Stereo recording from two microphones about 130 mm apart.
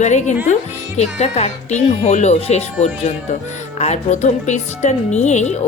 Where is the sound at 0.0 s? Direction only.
65° left (ahead or behind).